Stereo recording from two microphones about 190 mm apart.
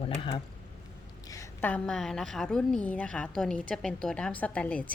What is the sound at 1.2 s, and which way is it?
A woman's voice, 15° left (ahead or behind).